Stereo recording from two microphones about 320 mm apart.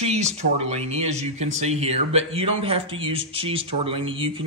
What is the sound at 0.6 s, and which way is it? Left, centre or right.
Speech, centre.